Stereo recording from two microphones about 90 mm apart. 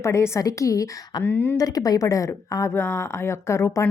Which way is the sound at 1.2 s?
25° left (ahead or behind).